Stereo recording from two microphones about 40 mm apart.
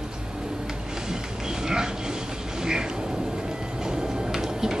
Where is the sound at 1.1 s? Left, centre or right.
Centre.